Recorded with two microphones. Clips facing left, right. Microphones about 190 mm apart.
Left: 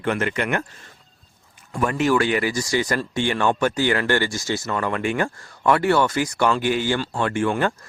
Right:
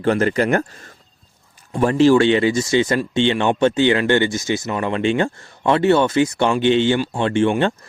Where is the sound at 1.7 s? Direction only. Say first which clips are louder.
Right 7 dB; 30° right (ahead or behind).